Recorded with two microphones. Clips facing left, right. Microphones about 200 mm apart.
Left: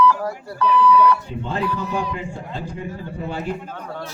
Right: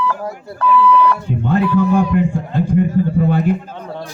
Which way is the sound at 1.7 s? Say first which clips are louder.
Right 12 dB; 50° right (ahead or behind).